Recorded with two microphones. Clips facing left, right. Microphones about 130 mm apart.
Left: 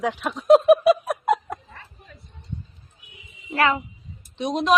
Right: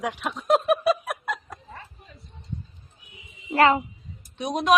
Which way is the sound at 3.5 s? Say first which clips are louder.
Right 3 dB; 30° right (ahead or behind).